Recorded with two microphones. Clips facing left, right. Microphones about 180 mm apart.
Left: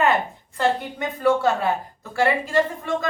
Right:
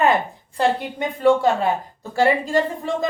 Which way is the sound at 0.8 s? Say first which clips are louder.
Right 3 dB; 25° right (ahead or behind).